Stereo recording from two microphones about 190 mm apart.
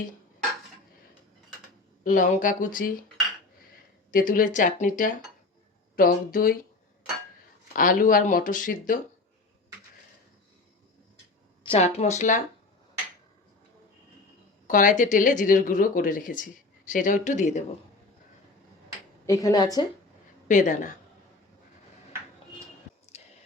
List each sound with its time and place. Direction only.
2.0 s speech: 45° left (ahead or behind)
4.1 s speech: 45° left (ahead or behind)
7.8 s speech: 45° left (ahead or behind)
11.6 s a sound: 30° left (ahead or behind)
11.9 s speech: 35° left (ahead or behind)
14.7 s speech: 45° left (ahead or behind)
19.2 s a woman's voice: 15° left (ahead or behind)
20.5 s speech: 40° left (ahead or behind)
23.1 s whispering: 35° left (ahead or behind)